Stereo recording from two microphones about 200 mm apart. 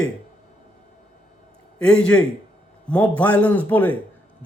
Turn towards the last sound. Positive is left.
turn(degrees=10)  # may be behind; listen again after turning